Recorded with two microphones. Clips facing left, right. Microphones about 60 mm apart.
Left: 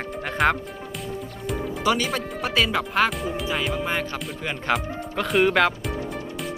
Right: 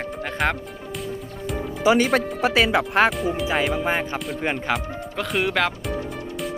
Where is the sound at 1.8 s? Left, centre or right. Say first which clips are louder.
Right 6 dB; centre.